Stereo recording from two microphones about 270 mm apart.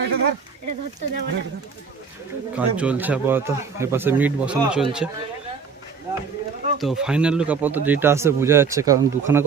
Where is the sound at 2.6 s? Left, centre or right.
Centre.